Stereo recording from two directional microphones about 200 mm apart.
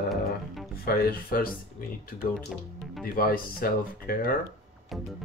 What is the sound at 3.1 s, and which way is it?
Speech, 45° left (ahead or behind).